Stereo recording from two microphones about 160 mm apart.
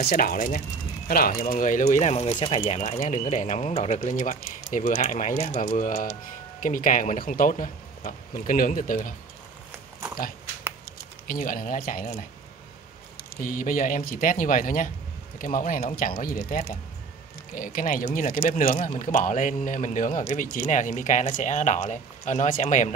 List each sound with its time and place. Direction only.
0.1 s speech: 65° left (ahead or behind); by 2.6 s 35° left (ahead or behind)
2.6 s speech: 45° left (ahead or behind)
11.2 s speech: 55° left (ahead or behind)
13.4 s speech: 60° left (ahead or behind)